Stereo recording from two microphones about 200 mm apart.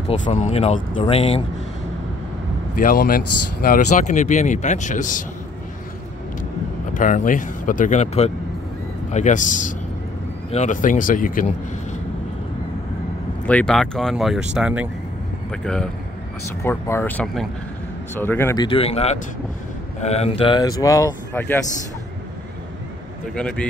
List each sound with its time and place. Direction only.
0.1 s speech: 35° left (ahead or behind)
2.8 s speech: 45° left (ahead or behind)
6.9 s speech: 40° left (ahead or behind)
13.5 s speech: 5° left (ahead or behind)
23.3 s speech: 5° left (ahead or behind)